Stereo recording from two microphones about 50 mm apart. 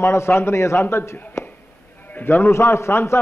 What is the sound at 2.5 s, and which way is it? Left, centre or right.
Speech, left.